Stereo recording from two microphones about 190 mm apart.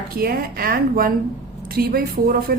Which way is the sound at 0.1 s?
50° right (ahead or behind).